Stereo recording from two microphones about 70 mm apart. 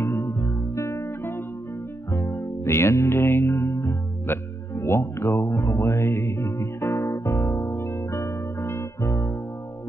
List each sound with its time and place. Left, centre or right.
0.0 s music: left